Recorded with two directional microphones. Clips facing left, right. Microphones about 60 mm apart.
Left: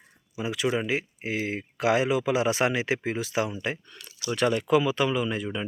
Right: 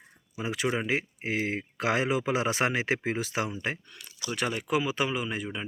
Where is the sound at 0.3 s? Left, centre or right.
Right.